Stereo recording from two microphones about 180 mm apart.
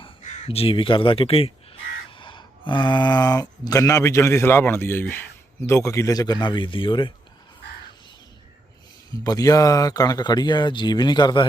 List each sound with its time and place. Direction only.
0.2 s speech: 40° left (ahead or behind)
9.2 s speech: 20° left (ahead or behind)